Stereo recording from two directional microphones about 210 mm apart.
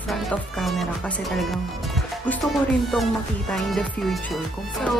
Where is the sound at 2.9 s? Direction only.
Centre (ahead or behind).